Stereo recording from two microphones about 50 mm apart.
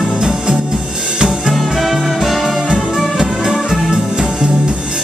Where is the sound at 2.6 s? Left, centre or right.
Centre.